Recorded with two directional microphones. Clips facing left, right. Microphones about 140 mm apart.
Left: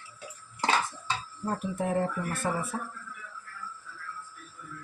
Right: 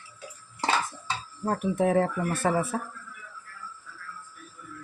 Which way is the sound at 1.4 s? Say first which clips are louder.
Right 6 dB; 80° right.